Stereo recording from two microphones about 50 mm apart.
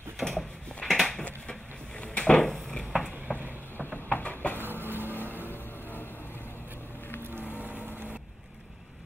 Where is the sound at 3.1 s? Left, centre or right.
Right.